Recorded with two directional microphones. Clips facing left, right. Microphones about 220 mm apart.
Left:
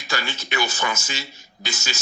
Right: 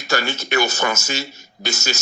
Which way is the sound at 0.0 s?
45° right (ahead or behind).